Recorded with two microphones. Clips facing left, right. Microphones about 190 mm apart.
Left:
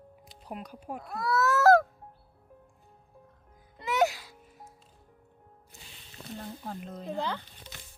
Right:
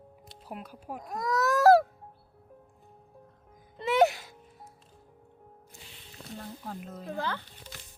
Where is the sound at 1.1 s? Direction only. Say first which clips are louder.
Even; 15° right (ahead or behind).